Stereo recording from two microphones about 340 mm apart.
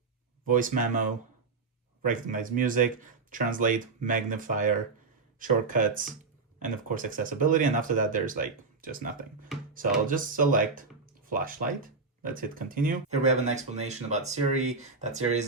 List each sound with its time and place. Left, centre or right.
0.4 s speech: right
2.0 s speech: right